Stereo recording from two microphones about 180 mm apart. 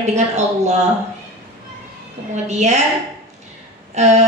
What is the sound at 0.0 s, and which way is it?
Speech, 40° right (ahead or behind).